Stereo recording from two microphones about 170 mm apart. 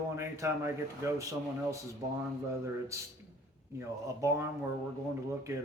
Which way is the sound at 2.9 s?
20° right (ahead or behind).